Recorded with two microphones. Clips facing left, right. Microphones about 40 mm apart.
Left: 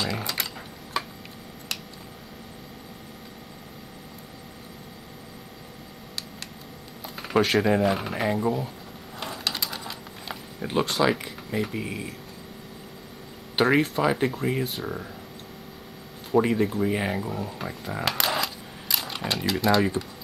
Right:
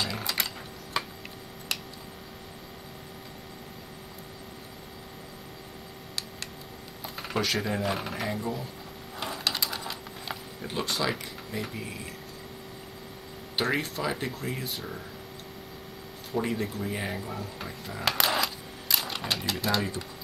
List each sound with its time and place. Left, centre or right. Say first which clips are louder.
0.0 s a sound: left 2 dB; centre
1.0 s tick-tock: left 2 dB; centre
7.0 s a sound: left 1 dB; centre
7.3 s speech: left 8 dB; centre
9.2 s a sound: even; centre
10.6 s speech: left 7 dB; centre
13.7 s speech: left 8 dB; centre
16.3 s speech: left 8 dB; left
17.3 s speech: left 5 dB; centre
18.0 s typewriter: even; centre